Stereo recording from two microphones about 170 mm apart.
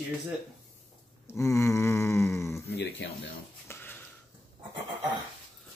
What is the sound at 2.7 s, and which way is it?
Speech, 90° left.